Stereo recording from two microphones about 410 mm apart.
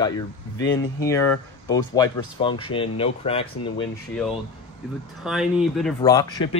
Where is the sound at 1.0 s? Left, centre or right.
Centre.